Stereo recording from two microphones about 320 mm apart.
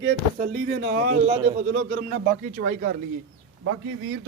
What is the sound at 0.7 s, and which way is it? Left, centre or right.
Speech, right.